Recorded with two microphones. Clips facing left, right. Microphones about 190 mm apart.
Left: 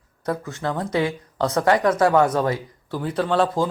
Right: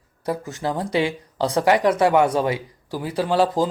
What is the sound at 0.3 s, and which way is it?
Speech, 15° right (ahead or behind).